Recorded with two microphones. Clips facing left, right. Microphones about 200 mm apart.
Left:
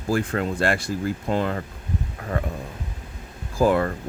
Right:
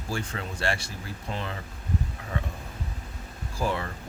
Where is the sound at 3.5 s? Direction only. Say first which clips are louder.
Left 10 dB; 90° left.